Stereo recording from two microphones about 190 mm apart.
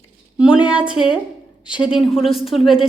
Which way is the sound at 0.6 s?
5° right (ahead or behind).